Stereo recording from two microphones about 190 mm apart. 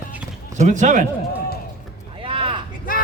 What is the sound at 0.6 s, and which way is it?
Speech, 40° right (ahead or behind).